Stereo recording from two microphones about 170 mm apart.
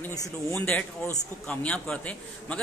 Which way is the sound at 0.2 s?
15° left (ahead or behind).